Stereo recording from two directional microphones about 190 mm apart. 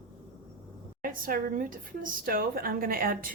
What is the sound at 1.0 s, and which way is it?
Speech, 45° right (ahead or behind).